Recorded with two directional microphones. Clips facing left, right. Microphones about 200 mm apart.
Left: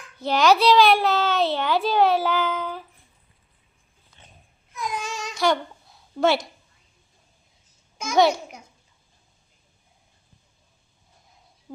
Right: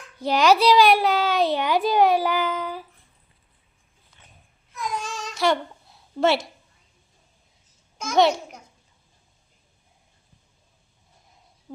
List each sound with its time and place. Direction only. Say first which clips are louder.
0.2 s a child's voice: even; 10° right (ahead or behind)
4.7 s babbling: even; centre (ahead or behind)
7.9 s a child's voice: even; centre (ahead or behind)